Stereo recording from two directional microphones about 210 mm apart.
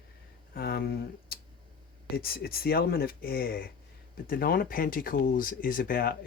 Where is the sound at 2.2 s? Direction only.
45° left (ahead or behind).